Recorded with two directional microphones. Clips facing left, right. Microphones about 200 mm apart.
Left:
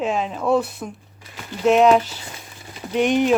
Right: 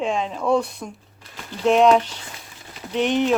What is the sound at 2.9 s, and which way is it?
Cutlery, 10° left (ahead or behind).